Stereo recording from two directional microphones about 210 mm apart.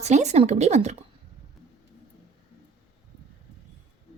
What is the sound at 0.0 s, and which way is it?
Speech, 30° right (ahead or behind).